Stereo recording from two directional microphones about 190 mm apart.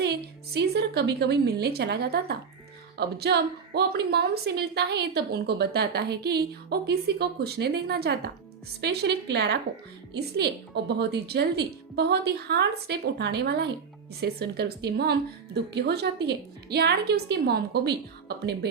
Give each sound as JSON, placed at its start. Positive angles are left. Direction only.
{"t": 0.0, "sound": "a woman's voice", "side_deg": -60}